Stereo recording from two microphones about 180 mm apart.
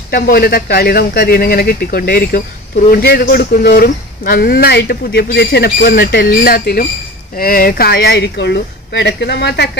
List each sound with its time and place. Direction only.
0.1 s speech: 60° left (ahead or behind)